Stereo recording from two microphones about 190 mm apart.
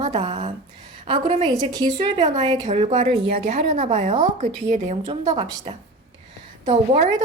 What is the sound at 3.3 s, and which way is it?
A woman's voice, 40° right (ahead or behind).